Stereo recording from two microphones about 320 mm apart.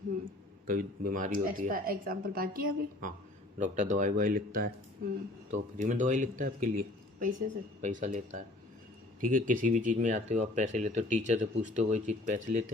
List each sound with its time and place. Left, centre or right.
0.7 s speech: right